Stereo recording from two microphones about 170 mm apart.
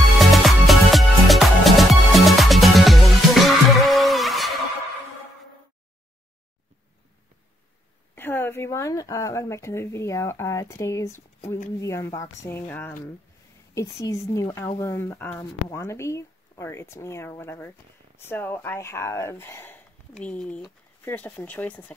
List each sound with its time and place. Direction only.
0.2 s music: centre (ahead or behind)
8.1 s speech: 10° left (ahead or behind)
14.0 s speech: 20° left (ahead or behind)